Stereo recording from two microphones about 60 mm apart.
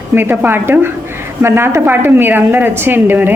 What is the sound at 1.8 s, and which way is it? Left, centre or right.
A woman's voice, right.